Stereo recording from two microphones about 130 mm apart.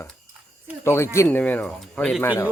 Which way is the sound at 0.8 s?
20° left (ahead or behind).